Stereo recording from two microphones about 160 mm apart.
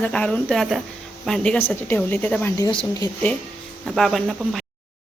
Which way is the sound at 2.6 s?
20° left (ahead or behind).